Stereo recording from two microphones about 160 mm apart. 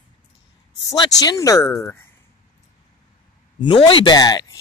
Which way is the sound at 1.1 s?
20° left (ahead or behind).